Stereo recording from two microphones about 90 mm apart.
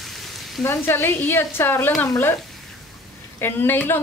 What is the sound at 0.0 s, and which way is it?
Frying, centre (ahead or behind).